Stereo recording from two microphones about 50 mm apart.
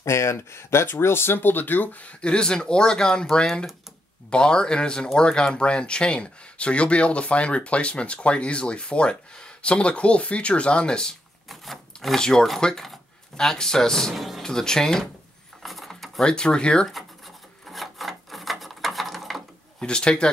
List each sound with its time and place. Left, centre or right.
0.0 s speech: left
2.2 s speech: centre
11.4 s speech: centre
15.6 s a sound: centre
16.3 s speech: centre
17.6 s ratchet: centre
19.8 s speech: centre